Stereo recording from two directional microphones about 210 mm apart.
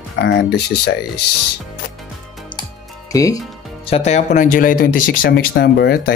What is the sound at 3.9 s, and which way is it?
Speech, 30° left (ahead or behind).